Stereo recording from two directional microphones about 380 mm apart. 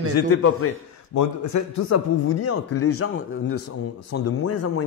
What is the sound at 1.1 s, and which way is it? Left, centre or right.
Speech, left.